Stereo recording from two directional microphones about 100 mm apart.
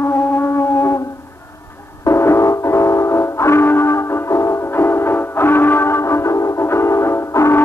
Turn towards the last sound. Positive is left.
turn(degrees=25)  # may be behind; listen again after turning